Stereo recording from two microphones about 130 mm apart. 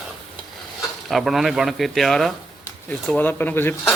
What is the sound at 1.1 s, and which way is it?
A man's voice, centre (ahead or behind).